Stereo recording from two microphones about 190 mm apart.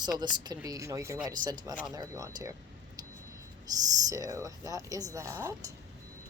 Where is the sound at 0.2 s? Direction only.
20° right (ahead or behind).